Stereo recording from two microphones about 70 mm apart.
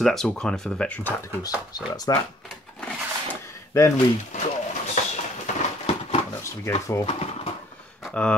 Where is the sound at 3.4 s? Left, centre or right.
Left.